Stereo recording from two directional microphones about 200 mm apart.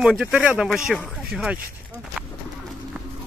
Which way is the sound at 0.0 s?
5° right (ahead or behind).